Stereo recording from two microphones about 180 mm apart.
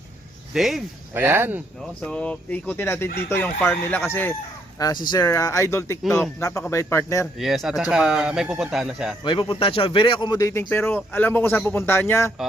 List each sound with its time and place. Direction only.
0.5 s a man's voice: centre (ahead or behind)
1.1 s speech: 10° right (ahead or behind)
2.0 s speech: 5° left (ahead or behind)
7.3 s a man's voice: centre (ahead or behind)
9.2 s speech: 25° left (ahead or behind)